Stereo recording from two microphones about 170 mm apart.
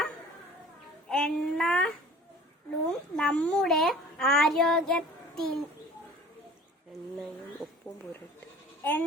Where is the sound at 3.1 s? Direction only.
5° left (ahead or behind).